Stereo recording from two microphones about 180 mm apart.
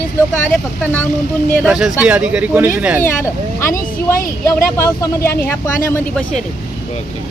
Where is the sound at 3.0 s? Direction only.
15° left (ahead or behind).